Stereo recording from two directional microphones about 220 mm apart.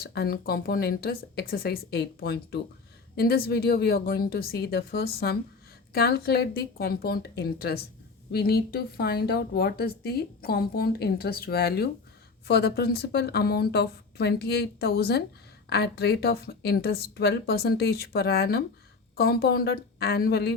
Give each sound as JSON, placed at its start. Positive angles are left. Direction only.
{"t": 0.0, "sound": "speech", "side_deg": 45}